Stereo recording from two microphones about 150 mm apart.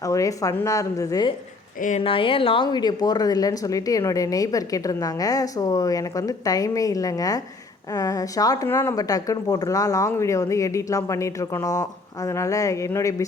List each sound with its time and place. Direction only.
0.0 s speech: 20° left (ahead or behind)
2.0 s speech: 35° left (ahead or behind); by 13.2 s 20° left (ahead or behind)